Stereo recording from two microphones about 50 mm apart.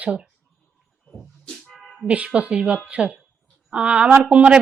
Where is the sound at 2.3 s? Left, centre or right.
Right.